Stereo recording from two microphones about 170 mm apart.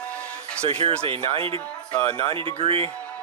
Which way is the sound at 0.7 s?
35° right (ahead or behind).